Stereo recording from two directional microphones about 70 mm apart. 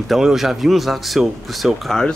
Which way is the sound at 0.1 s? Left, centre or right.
Centre.